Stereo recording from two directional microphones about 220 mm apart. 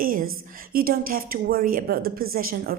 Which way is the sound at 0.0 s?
40° right (ahead or behind).